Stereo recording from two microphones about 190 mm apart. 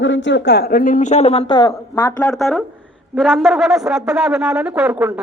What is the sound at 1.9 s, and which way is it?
Speech, 10° left (ahead or behind).